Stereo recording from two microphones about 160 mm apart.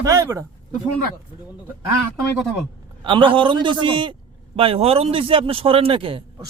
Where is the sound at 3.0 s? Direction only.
30° right (ahead or behind).